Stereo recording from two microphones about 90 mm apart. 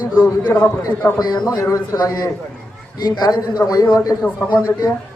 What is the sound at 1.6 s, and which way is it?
A man's voice, 40° left (ahead or behind).